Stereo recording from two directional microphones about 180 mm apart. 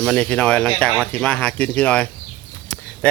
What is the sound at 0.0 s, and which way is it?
Speech, 5° left (ahead or behind).